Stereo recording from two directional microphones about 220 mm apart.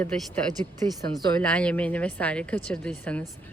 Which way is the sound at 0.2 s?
10° left (ahead or behind).